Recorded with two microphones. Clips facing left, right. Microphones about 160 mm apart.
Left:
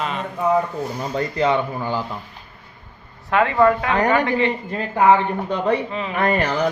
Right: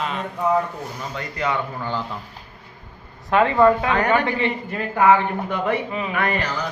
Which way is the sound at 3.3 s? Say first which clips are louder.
Right 1 dB; 20° right (ahead or behind).